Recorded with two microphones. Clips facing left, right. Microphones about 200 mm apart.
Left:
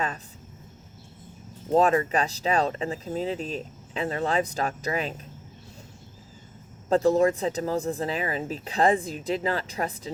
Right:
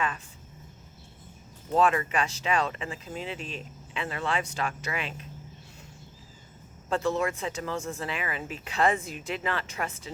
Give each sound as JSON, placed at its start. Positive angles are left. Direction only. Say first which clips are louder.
{"t": 1.7, "sound": "speech", "louder": "left 4 dB", "side_deg": 35}
{"t": 6.9, "sound": "speech", "louder": "left 7 dB", "side_deg": 35}